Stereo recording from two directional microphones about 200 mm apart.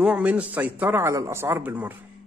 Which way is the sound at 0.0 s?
5° right (ahead or behind).